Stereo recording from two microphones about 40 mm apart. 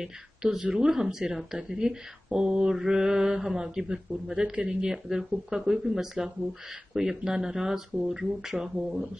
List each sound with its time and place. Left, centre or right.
0.0 s speech: centre